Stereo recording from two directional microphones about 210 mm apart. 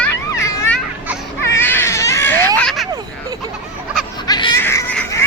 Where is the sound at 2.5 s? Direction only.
Centre (ahead or behind).